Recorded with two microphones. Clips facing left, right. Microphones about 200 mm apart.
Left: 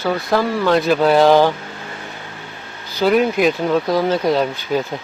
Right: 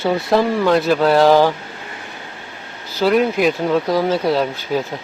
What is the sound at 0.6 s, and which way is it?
Speech, centre (ahead or behind).